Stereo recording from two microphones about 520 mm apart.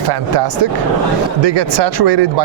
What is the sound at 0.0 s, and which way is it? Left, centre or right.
A man's voice, right.